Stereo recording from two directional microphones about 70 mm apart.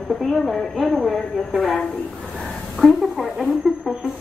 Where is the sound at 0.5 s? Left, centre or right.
Centre.